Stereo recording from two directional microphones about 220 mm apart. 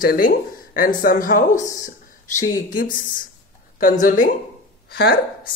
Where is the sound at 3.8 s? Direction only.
40° left (ahead or behind).